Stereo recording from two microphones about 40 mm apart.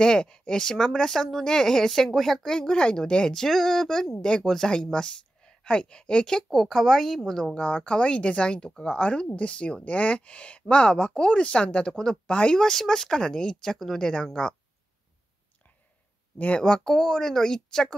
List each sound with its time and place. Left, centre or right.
0.0 s speech: left
3.3 s speech: centre
6.5 s speech: centre
7.5 s speech: left
9.8 s speech: left; by 12.2 s centre
12.3 s speech: left
12.5 s speech: centre
16.5 s speech: centre